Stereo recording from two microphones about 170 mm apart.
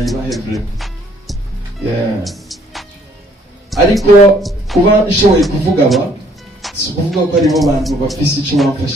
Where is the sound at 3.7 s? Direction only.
Centre (ahead or behind).